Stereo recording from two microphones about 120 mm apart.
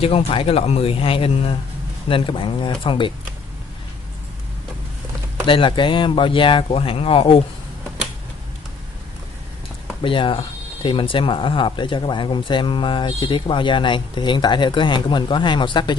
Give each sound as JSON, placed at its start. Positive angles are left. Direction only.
{"t": 0.0, "sound": "speech", "side_deg": 55}
{"t": 5.5, "sound": "speech", "side_deg": 45}
{"t": 10.0, "sound": "speech", "side_deg": 45}